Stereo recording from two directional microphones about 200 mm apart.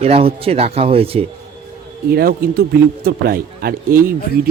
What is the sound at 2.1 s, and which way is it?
Speech, 50° right (ahead or behind).